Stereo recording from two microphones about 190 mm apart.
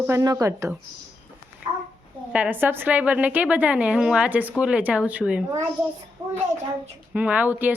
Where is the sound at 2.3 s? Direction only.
10° right (ahead or behind).